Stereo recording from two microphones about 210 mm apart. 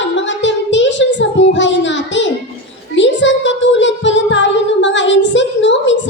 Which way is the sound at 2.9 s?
60° left (ahead or behind).